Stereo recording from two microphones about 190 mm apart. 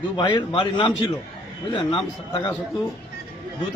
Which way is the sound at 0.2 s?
25° left (ahead or behind).